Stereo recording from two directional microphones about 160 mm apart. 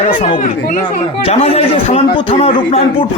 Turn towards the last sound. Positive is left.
turn(degrees=35)  # may be behind; listen again after turning